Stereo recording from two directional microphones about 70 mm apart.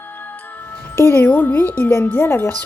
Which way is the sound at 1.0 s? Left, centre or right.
Left.